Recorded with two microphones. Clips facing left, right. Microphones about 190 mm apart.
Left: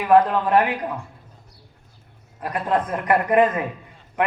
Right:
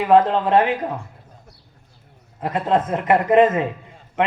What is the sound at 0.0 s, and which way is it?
Speech, 25° right (ahead or behind).